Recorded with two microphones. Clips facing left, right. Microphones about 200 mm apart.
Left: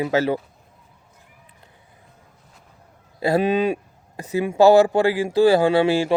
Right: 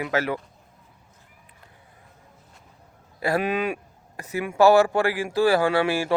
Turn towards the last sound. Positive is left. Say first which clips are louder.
# left 5 dB
turn(degrees=20)  # may be behind; listen again after turning